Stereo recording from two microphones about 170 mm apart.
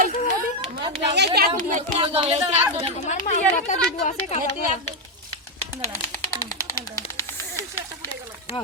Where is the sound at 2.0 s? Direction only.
35° right (ahead or behind).